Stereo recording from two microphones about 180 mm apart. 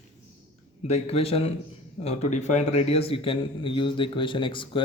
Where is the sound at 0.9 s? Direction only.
35° left (ahead or behind).